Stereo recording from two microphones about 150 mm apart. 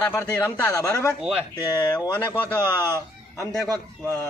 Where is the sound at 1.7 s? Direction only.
25° left (ahead or behind).